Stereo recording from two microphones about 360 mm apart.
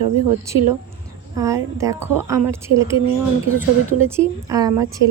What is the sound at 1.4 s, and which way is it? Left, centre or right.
A woman's voice, centre.